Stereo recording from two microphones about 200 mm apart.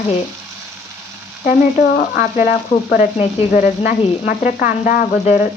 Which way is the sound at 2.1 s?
40° left (ahead or behind).